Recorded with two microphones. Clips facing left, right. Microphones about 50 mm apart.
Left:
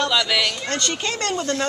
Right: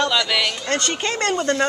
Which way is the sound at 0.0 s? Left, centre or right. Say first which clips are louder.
Right 1 dB; centre.